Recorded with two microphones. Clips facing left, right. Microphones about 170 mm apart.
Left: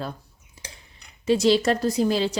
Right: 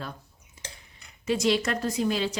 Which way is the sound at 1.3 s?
30° left (ahead or behind).